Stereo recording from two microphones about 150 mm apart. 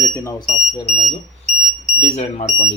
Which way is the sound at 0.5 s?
45° left (ahead or behind).